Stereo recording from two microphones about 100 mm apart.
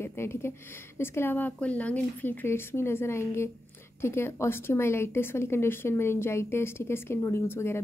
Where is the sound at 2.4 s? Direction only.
25° left (ahead or behind).